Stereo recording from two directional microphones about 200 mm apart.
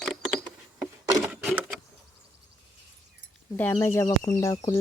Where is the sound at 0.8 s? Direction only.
Centre (ahead or behind).